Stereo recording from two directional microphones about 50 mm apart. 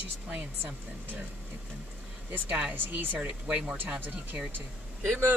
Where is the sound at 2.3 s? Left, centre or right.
Right.